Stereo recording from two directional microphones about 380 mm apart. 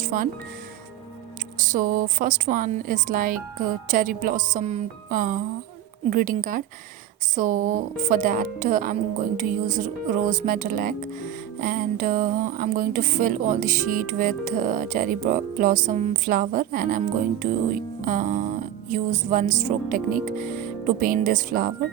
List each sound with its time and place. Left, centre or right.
0.0 s speech: right
1.5 s speech: right